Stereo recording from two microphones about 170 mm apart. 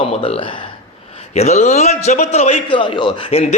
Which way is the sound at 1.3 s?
40° left (ahead or behind).